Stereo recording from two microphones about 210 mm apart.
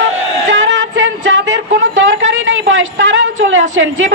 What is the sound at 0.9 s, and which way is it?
Music, 60° right (ahead or behind).